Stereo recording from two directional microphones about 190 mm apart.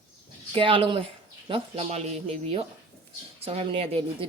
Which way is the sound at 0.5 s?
25° right (ahead or behind).